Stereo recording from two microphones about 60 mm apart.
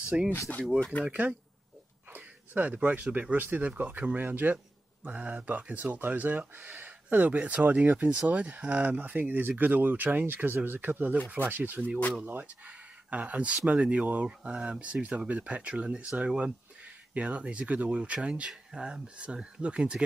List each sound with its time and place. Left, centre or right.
0.1 s speech: centre
17.1 s speech: right